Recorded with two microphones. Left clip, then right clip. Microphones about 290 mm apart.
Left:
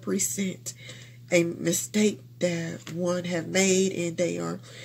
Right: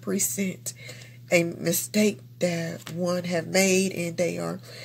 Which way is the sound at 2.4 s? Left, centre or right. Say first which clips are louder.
Right 1 dB; right.